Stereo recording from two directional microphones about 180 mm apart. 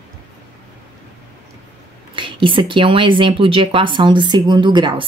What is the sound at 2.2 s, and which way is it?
A woman's voice, 30° right (ahead or behind).